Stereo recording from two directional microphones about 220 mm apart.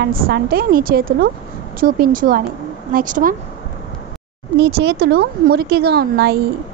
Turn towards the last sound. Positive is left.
turn(degrees=-45)  # may be behind; listen again after turning